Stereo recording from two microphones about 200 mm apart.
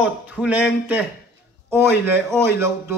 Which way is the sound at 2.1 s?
10° right (ahead or behind).